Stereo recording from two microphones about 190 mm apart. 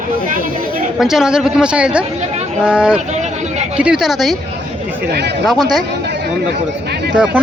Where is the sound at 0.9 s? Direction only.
Centre (ahead or behind).